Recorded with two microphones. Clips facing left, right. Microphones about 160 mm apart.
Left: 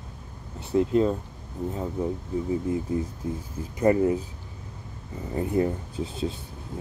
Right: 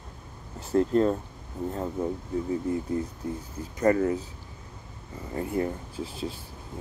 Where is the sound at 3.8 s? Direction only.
20° left (ahead or behind).